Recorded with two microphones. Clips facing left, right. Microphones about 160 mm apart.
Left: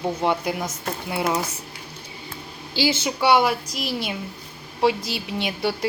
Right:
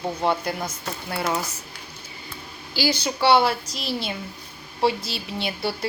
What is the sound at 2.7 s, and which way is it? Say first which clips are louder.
A woman's voice: left 2 dB; 20° left (ahead or behind).